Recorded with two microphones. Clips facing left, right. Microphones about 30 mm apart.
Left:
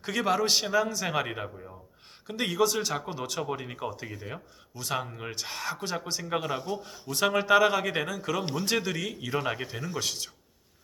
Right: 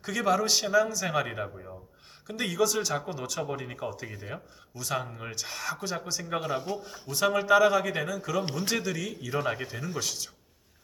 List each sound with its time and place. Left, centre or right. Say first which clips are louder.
0.0 s speech: even; left
4.1 s speech: even; centre
4.7 s speech: even; centre
9.3 s speech: right 1 dB; centre
10.0 s speech: left 3 dB; left